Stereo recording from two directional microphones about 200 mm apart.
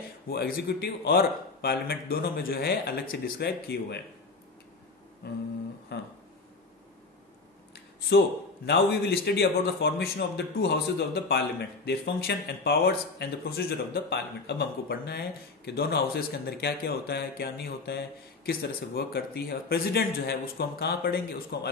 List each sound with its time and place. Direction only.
0.3 s a man's voice: 50° left (ahead or behind)
5.2 s a sound: 55° left (ahead or behind)
8.6 s a man's voice: 55° left (ahead or behind)